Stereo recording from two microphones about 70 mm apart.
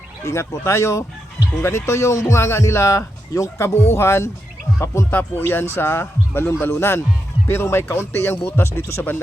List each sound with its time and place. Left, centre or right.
0.3 s a man's voice: left